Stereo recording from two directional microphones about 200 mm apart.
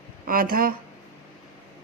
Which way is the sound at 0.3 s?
45° right (ahead or behind).